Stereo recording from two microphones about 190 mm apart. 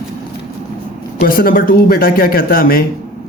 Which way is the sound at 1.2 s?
50° left (ahead or behind).